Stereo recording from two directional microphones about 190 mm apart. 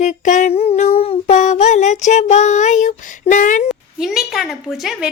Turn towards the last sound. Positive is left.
turn(degrees=0)  # may be behind; listen again after turning